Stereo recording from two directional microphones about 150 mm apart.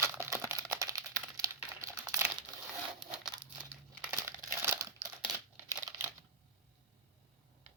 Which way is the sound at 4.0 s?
20° right (ahead or behind).